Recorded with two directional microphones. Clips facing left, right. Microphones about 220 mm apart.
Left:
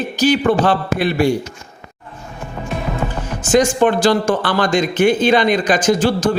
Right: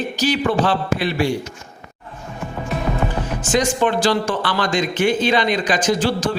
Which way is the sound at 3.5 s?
50° left (ahead or behind).